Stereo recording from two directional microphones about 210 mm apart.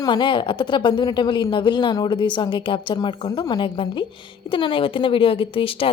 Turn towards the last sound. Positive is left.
turn(degrees=25)  # may be behind; listen again after turning